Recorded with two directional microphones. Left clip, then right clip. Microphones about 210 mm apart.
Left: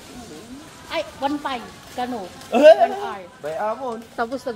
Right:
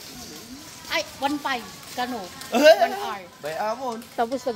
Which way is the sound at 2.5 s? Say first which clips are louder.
Left 4 dB; 5° right (ahead or behind).